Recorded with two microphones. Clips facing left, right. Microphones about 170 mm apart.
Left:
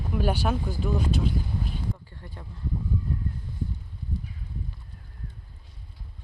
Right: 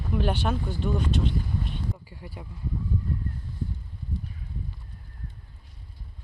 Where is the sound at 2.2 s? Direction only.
10° right (ahead or behind).